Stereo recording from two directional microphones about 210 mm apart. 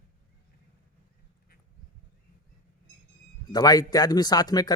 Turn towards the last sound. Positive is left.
turn(degrees=20)  # may be behind; listen again after turning